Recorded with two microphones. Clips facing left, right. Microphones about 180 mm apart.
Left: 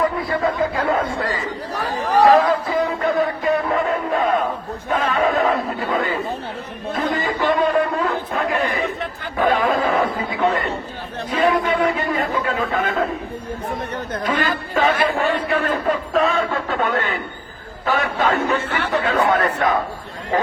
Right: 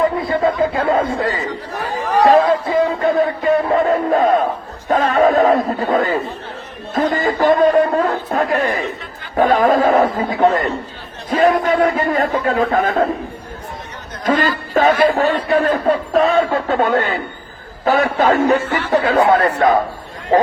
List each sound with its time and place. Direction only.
0.0 s chatter: 25° right (ahead or behind)
2.2 s music: 25° right (ahead or behind)
4.9 s a sound: 40° right (ahead or behind)
11.3 s a man's voice: 40° right (ahead or behind)
14.7 s speech: 45° right (ahead or behind)